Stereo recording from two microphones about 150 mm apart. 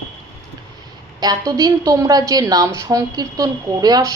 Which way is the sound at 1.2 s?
25° right (ahead or behind).